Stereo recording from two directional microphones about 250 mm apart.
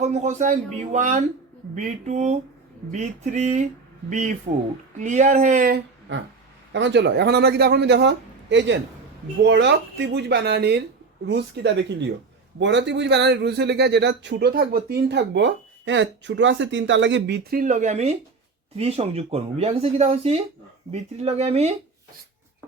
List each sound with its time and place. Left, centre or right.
0.0 s speech: right